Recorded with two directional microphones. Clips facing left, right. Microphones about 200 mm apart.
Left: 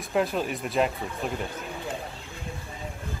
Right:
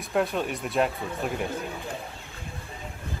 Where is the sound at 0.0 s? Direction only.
Centre (ahead or behind).